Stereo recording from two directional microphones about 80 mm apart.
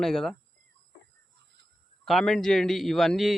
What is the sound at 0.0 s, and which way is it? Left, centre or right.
Speech, centre.